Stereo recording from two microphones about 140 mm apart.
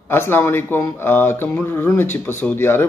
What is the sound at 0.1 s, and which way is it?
Speech, 15° left (ahead or behind).